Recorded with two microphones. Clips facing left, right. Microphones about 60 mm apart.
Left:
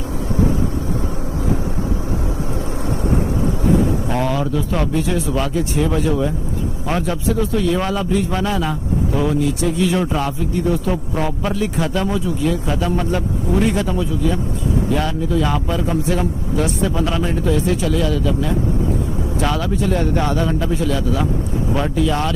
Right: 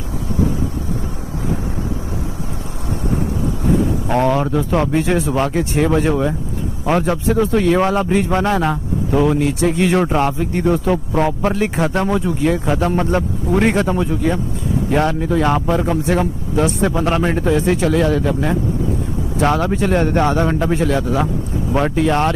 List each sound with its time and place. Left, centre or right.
4.1 s a man's voice: right